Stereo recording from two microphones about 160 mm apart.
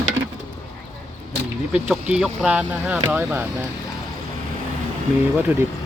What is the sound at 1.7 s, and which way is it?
Speech, 5° right (ahead or behind).